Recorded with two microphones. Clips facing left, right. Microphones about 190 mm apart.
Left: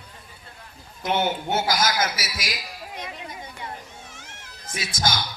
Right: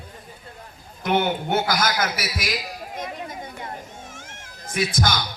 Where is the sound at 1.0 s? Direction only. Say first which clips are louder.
Right 2 dB; 60° right (ahead or behind).